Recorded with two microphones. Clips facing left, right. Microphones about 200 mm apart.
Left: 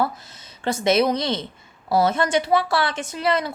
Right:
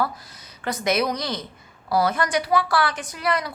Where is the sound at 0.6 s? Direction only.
25° left (ahead or behind).